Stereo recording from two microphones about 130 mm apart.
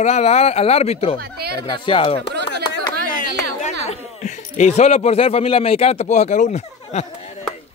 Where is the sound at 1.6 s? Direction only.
40° left (ahead or behind).